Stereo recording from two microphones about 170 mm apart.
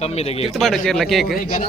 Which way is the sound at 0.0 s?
40° left (ahead or behind).